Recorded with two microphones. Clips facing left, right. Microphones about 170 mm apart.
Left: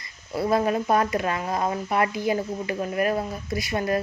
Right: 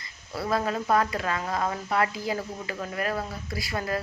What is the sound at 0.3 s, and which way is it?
Speech, 20° left (ahead or behind).